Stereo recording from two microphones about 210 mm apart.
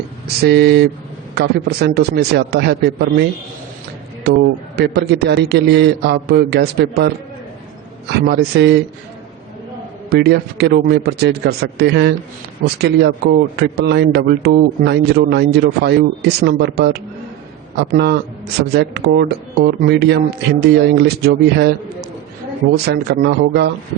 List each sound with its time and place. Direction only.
0.4 s a man's voice: 50° right (ahead or behind)
4.8 s a man's voice: 50° right (ahead or behind)
8.3 s a man's voice: 50° right (ahead or behind)
10.1 s a man's voice: 50° right (ahead or behind)
22.7 s a man's voice: 50° right (ahead or behind)